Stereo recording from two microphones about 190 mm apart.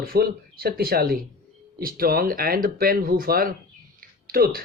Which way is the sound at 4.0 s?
50° right (ahead or behind).